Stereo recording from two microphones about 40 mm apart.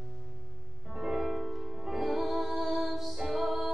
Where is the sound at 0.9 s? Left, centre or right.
Centre.